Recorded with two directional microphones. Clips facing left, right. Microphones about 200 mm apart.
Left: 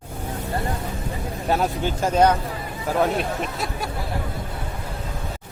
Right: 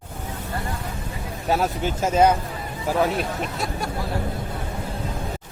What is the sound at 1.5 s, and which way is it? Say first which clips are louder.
Speech: even; centre (ahead or behind).